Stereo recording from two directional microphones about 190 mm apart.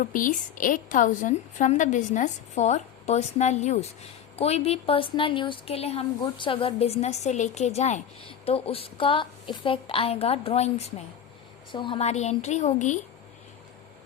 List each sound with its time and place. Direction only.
0.0 s a woman's voice: 45° left (ahead or behind)